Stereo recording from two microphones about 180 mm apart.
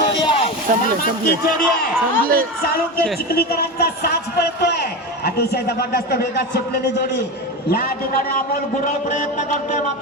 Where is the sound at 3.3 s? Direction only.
60° left (ahead or behind).